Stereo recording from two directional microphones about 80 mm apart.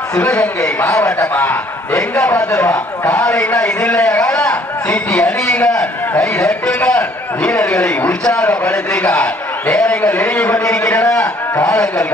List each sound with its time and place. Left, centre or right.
0.2 s a man's voice: centre
1.3 s a man's voice: left
2.3 s speech: left
3.1 s a man's voice: centre